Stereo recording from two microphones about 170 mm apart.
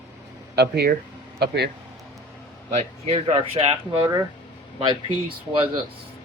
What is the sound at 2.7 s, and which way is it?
A man's voice, 40° right (ahead or behind).